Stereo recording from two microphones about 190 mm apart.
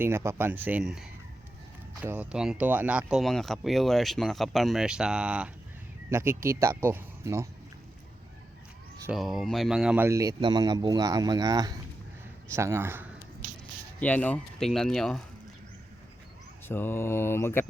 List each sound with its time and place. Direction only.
0.0 s speech: 15° right (ahead or behind)
9.0 s speech: centre (ahead or behind)
14.0 s speech: 10° left (ahead or behind)
16.6 s mantra: 10° left (ahead or behind)